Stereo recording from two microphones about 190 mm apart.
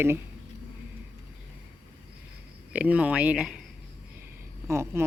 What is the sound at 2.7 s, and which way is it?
Speech, 10° right (ahead or behind).